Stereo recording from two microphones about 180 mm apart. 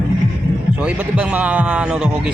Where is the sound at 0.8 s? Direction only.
5° right (ahead or behind).